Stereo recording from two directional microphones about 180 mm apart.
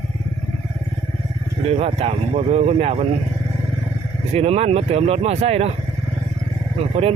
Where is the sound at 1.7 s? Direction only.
35° right (ahead or behind).